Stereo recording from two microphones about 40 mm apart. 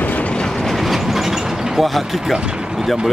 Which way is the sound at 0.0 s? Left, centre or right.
Left.